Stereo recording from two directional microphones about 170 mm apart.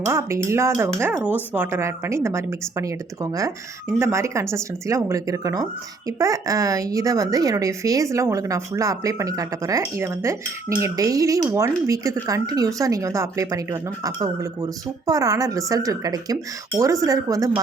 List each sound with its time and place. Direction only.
0.0 s speech: 15° right (ahead or behind)
3.9 s speech: 15° right (ahead or behind)